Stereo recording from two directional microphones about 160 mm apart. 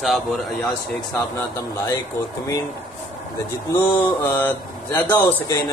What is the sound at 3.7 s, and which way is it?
Speech, 10° left (ahead or behind).